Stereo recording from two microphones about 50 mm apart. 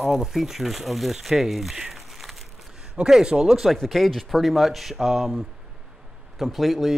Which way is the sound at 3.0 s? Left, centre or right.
Centre.